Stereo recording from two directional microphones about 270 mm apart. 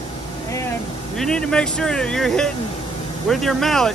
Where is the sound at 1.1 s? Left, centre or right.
Centre.